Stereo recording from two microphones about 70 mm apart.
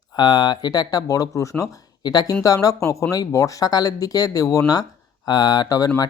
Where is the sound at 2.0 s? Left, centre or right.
Left.